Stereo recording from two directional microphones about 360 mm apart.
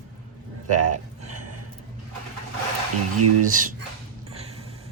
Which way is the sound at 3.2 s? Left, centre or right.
Right.